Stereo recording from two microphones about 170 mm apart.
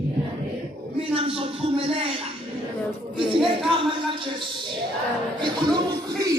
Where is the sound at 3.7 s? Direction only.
30° right (ahead or behind).